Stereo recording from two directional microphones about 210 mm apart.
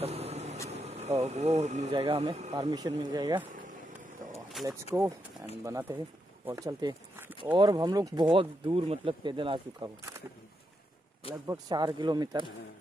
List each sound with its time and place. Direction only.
0.0 s vehicle: 30° right (ahead or behind)
0.7 s speech: 30° right (ahead or behind)
2.5 s speech: 15° right (ahead or behind)
4.6 s speech: centre (ahead or behind)
5.6 s speech: 15° right (ahead or behind)
11.4 s speech: 20° right (ahead or behind)